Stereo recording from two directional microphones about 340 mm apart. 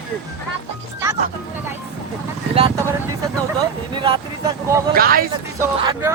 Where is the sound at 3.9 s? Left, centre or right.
Centre.